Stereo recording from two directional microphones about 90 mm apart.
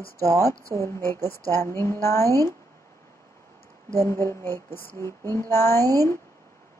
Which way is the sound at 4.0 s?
30° left (ahead or behind).